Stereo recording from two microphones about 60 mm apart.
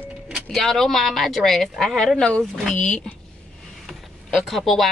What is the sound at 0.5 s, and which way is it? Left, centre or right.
A woman's voice, centre.